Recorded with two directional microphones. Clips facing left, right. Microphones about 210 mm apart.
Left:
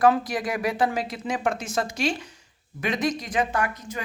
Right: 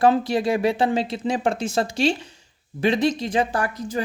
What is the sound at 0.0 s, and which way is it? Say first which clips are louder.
Speech: right 3 dB; 30° right (ahead or behind).